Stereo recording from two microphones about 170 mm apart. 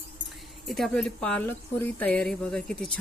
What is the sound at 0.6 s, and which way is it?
Speech, centre (ahead or behind).